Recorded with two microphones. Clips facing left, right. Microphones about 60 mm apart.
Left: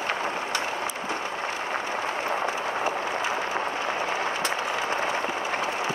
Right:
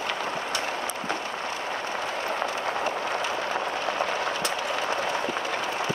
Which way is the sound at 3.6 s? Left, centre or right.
Left.